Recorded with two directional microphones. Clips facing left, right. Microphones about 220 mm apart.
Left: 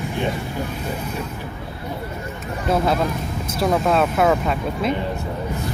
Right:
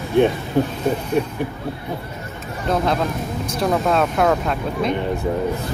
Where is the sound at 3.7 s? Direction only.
Centre (ahead or behind).